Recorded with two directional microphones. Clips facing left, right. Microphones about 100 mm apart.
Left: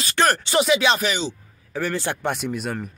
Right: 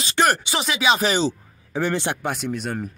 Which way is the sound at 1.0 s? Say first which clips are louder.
Right 4 dB; 40° right (ahead or behind).